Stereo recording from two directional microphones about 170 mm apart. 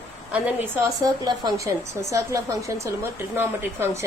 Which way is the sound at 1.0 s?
25° right (ahead or behind).